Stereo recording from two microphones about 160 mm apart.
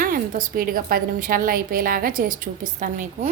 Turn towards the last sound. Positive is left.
turn(degrees=-50)  # may be behind; listen again after turning